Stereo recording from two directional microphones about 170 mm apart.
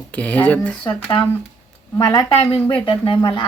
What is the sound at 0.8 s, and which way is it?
Speech, 30° left (ahead or behind).